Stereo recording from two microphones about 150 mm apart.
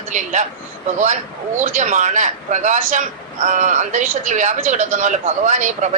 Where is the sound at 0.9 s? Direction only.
55° right (ahead or behind).